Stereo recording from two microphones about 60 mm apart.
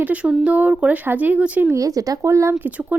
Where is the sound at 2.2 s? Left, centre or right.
Right.